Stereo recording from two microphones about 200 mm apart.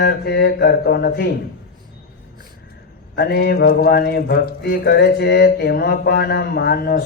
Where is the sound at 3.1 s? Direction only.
50° left (ahead or behind).